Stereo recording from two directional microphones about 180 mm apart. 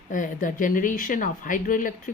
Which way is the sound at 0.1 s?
50° left (ahead or behind).